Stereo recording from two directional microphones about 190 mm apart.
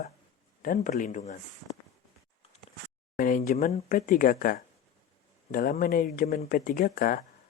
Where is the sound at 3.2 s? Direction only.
45° left (ahead or behind).